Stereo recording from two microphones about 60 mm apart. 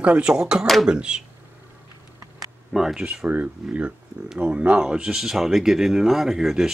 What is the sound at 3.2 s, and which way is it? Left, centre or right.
Speech, right.